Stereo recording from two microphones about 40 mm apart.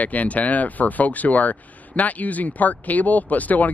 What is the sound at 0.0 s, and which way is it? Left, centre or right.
Speech, left.